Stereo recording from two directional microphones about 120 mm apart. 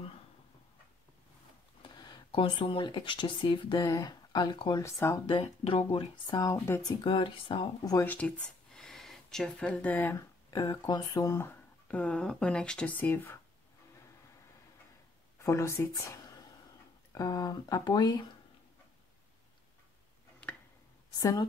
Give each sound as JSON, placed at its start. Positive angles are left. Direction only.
{"t": 1.8, "sound": "speech", "side_deg": 35}
{"t": 3.8, "sound": "speech", "side_deg": 30}
{"t": 4.8, "sound": "speech", "side_deg": 25}
{"t": 5.3, "sound": "speech", "side_deg": 50}
{"t": 5.9, "sound": "speech", "side_deg": 35}
{"t": 7.0, "sound": "speech", "side_deg": 45}
{"t": 8.0, "sound": "speech", "side_deg": 10}
{"t": 10.5, "sound": "speech", "side_deg": 30}
{"t": 11.9, "sound": "speech", "side_deg": 10}
{"t": 15.3, "sound": "speech", "side_deg": 25}
{"t": 21.2, "sound": "speech", "side_deg": 30}